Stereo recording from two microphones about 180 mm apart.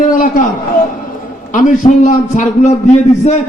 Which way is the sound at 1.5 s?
45° left (ahead or behind).